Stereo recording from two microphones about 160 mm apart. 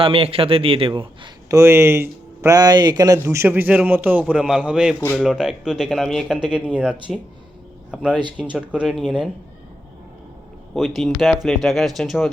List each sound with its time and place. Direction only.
0.0 s a man's voice: 35° right (ahead or behind)
1.5 s speech: 20° right (ahead or behind)
8.5 s speech: 5° right (ahead or behind)
10.8 s speech: centre (ahead or behind)